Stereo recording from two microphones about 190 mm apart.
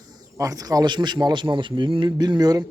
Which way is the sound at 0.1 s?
20° right (ahead or behind).